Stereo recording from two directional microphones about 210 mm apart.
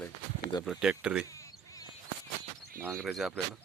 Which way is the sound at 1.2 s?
15° left (ahead or behind).